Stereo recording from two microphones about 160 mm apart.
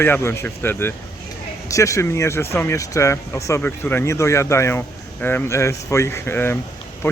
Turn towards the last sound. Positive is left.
turn(degrees=15)  # may be behind; listen again after turning